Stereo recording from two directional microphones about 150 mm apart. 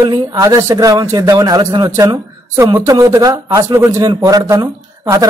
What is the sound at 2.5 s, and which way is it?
A man's voice, 20° right (ahead or behind).